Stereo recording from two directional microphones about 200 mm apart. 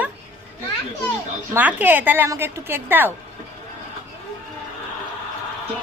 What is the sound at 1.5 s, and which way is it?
A woman's voice, 10° right (ahead or behind).